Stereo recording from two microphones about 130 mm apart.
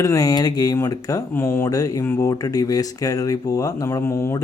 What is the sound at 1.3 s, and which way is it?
Speech, 15° left (ahead or behind).